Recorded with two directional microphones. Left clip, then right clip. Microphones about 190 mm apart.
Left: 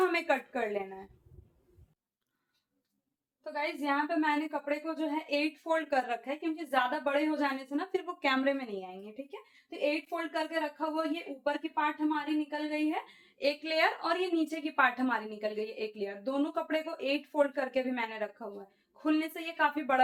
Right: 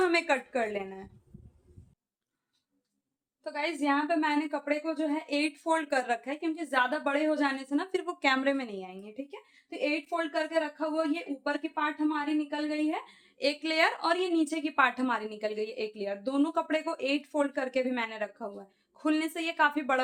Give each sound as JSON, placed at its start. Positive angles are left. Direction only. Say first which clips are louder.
{"t": 0.0, "sound": "a woman's voice", "louder": "right 2 dB", "side_deg": -45}
{"t": 3.4, "sound": "a woman's voice", "louder": "right 3 dB", "side_deg": -30}